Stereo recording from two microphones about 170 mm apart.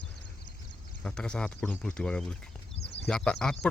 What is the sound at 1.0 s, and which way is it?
Speech, 5° left (ahead or behind).